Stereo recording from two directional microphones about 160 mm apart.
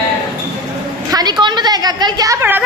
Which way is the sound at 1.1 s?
25° right (ahead or behind).